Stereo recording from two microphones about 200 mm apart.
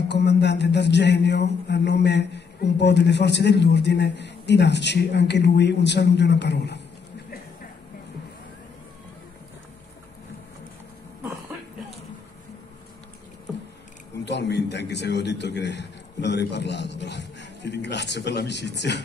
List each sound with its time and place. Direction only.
0.1 s speech: 60° left (ahead or behind)
14.2 s speech: 60° left (ahead or behind)